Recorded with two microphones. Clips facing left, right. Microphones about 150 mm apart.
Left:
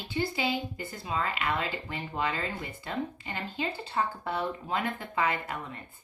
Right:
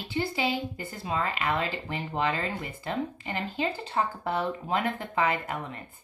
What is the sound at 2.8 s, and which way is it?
Speech, 40° right (ahead or behind).